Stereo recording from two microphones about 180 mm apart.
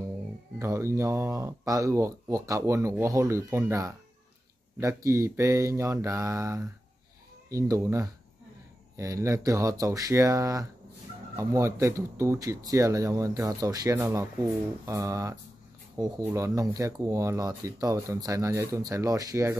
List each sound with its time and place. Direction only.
0.6 s speech: 15° right (ahead or behind)